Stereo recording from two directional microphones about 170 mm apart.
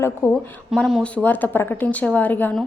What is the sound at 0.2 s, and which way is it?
Speech, 15° left (ahead or behind).